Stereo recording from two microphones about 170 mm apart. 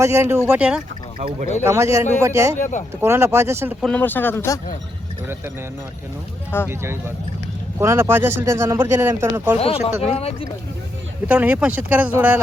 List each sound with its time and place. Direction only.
0.0 s speech: 15° right (ahead or behind)
0.3 s speech: 5° right (ahead or behind)
1.6 s speech: 15° right (ahead or behind)
2.6 s speech: 45° left (ahead or behind)
3.0 s speech: 15° right (ahead or behind)
3.8 s speech: 5° left (ahead or behind)
6.7 s speech: 15° right (ahead or behind)
9.6 s speech: 35° left (ahead or behind)
11.3 s speech: 10° right (ahead or behind)